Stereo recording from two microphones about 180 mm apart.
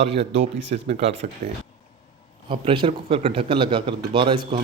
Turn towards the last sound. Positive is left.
turn(degrees=-30)  # may be behind; listen again after turning